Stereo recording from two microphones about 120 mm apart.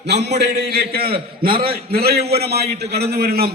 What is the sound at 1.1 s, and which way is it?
Speech, 50° right (ahead or behind).